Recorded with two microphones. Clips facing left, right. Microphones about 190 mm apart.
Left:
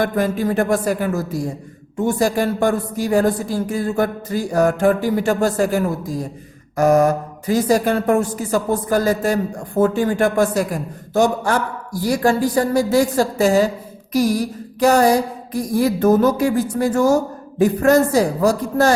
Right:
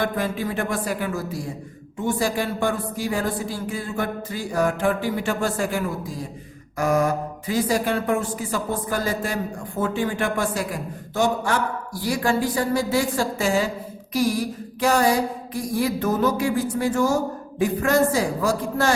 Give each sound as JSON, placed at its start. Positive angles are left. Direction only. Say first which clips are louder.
{"t": 0.0, "sound": "a woman's voice", "louder": "left 6 dB", "side_deg": 45}
{"t": 14.8, "sound": "a woman's voice", "louder": "left 5 dB", "side_deg": 40}